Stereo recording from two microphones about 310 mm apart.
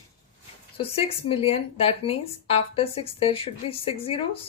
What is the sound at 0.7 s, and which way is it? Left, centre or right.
A woman's voice, centre.